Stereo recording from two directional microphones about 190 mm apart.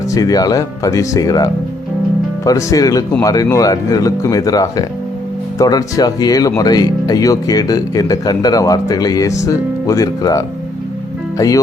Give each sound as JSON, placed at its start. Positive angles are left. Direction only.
{"t": 0.1, "sound": "speech", "side_deg": 20}